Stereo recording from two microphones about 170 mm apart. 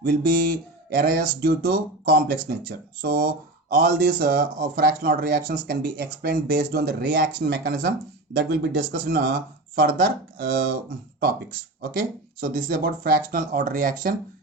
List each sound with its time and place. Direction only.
0.0 s speech: 60° right (ahead or behind)
11.8 s speech: 55° right (ahead or behind)